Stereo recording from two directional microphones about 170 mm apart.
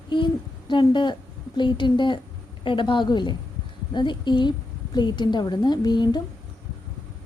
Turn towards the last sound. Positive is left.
turn(degrees=25)  # may be behind; listen again after turning